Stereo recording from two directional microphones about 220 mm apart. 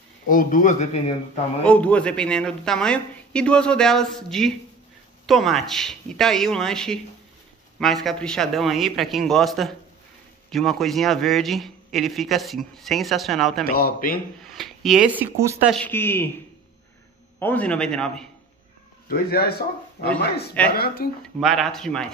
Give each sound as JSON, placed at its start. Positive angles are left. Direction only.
{"t": 0.3, "sound": "speech", "side_deg": 35}
{"t": 1.6, "sound": "a man's voice", "side_deg": 5}
{"t": 13.7, "sound": "speech", "side_deg": 40}
{"t": 14.4, "sound": "a man's voice", "side_deg": 0}
{"t": 15.7, "sound": "speech", "side_deg": 10}
{"t": 17.4, "sound": "a man's voice", "side_deg": 5}
{"t": 19.0, "sound": "speech", "side_deg": 45}
{"t": 21.4, "sound": "a man's voice", "side_deg": 0}